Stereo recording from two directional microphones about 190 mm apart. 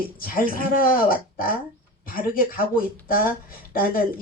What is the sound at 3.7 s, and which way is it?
Speech, 50° left (ahead or behind).